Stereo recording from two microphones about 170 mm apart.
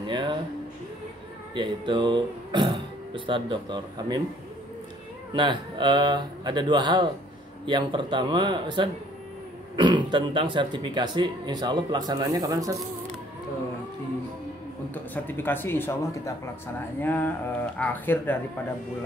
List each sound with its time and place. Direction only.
0.0 s a sound: 25° right (ahead or behind)
1.5 s speech: 30° right (ahead or behind)
5.3 s speech: 30° right (ahead or behind)
15.2 s speech: 10° left (ahead or behind)